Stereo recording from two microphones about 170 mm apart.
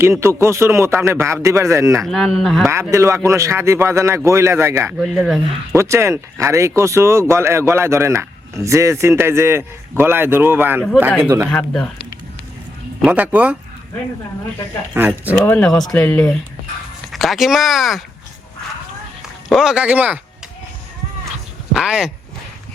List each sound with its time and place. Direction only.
0.0 s speech: 15° right (ahead or behind)
2.0 s speech: centre (ahead or behind)
2.9 s speech: 15° right (ahead or behind)
4.9 s speech: centre (ahead or behind)
5.7 s speech: 15° right (ahead or behind)
11.4 s speech: 5° left (ahead or behind)
13.0 s speech: 5° right (ahead or behind)
14.9 s speech: 10° right (ahead or behind)
15.4 s speech: 10° left (ahead or behind)
19.5 s speech: 5° right (ahead or behind)
21.7 s speech: 5° right (ahead or behind)